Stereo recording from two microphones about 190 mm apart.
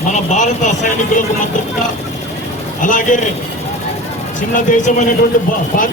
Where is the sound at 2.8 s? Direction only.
45° left (ahead or behind).